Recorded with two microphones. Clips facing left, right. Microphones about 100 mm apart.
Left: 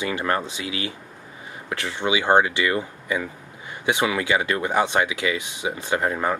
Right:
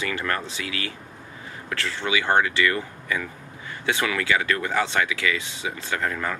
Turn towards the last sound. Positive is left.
turn(degrees=25)  # may be behind; listen again after turning